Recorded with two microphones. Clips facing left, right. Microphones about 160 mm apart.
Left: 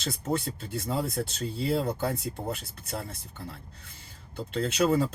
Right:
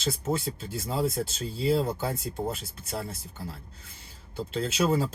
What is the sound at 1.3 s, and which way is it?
Speech, 60° left (ahead or behind).